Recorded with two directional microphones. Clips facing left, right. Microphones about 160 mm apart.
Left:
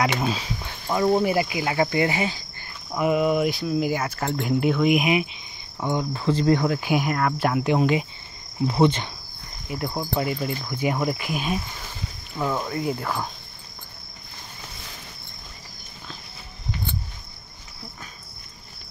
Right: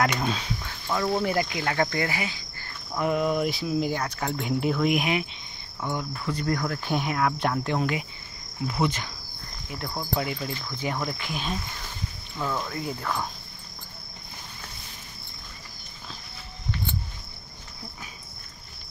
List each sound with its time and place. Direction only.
0.0 s speech: 5° left (ahead or behind)
1.2 s speech: 10° left (ahead or behind)
2.0 s cricket: 20° left (ahead or behind)
2.9 s speech: 10° left (ahead or behind)
5.8 s cricket: 25° left (ahead or behind)
6.8 s speech: 5° left (ahead or behind)
7.6 s cricket: 20° left (ahead or behind)
8.6 s cricket: 30° left (ahead or behind)
9.7 s speech: 10° left (ahead or behind)
12.7 s speech: 5° left (ahead or behind)